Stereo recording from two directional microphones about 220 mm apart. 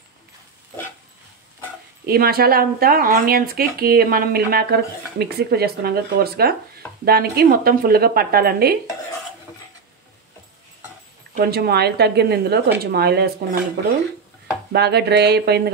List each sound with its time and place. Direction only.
2.0 s speech: 45° right (ahead or behind)
11.3 s speech: 45° right (ahead or behind)
14.7 s speech: 50° right (ahead or behind)